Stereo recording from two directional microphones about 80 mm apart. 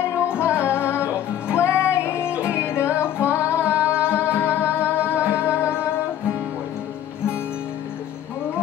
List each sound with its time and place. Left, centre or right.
0.3 s music: left
2.0 s music: centre
2.4 s music: left